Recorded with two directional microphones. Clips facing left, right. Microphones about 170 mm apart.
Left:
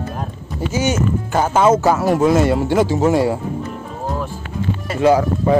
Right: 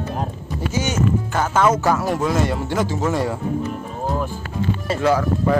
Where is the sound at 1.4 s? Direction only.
25° left (ahead or behind).